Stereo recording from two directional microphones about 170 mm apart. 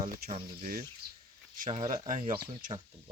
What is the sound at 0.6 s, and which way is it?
Speech, 55° right (ahead or behind).